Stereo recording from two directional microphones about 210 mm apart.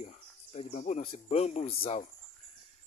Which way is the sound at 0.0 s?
30° left (ahead or behind).